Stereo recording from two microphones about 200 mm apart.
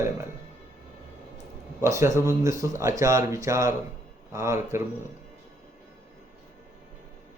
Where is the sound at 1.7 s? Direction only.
15° right (ahead or behind).